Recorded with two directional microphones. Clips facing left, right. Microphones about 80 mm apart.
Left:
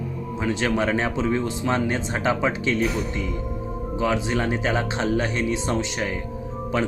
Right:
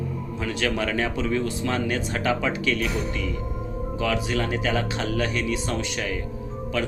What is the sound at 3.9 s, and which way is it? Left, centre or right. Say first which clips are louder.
Speech: left 2 dB; left.